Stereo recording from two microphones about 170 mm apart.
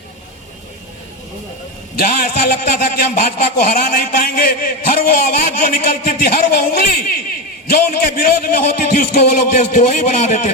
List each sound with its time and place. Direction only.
2.0 s a man's voice: 60° left (ahead or behind); by 10.5 s 45° left (ahead or behind)